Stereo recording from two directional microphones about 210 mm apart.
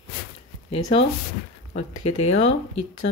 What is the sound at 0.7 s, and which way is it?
Speech, 25° left (ahead or behind).